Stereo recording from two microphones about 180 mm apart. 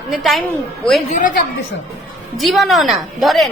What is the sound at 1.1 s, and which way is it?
Speech, 45° left (ahead or behind).